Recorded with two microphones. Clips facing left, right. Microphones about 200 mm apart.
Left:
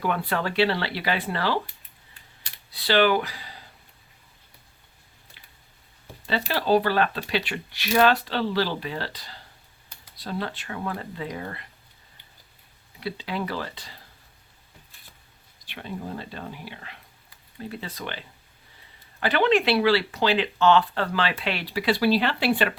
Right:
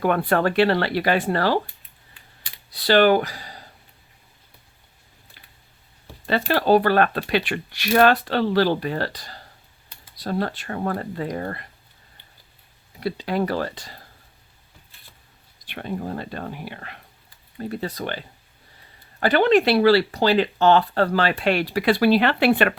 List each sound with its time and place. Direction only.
0.0 s speech: 50° right (ahead or behind)
2.7 s speech: 45° right (ahead or behind)
6.2 s speech: 50° right (ahead or behind)
13.0 s speech: 45° right (ahead or behind)
15.6 s speech: 50° right (ahead or behind)
19.2 s speech: 45° right (ahead or behind)